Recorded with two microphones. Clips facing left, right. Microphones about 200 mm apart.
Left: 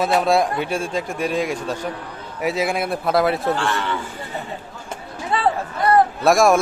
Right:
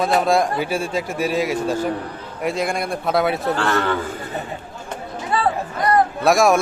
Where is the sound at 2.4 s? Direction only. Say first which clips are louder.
Left 1 dB; 5° left (ahead or behind).